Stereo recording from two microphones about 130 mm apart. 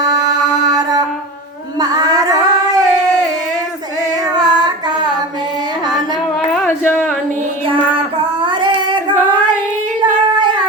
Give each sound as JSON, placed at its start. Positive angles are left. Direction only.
{"t": 0.0, "sound": "mantra", "side_deg": -30}
{"t": 1.8, "sound": "singing", "side_deg": -30}
{"t": 4.4, "sound": "child singing", "side_deg": -30}
{"t": 6.7, "sound": "a sound", "side_deg": 15}
{"t": 8.4, "sound": "female singing", "side_deg": -35}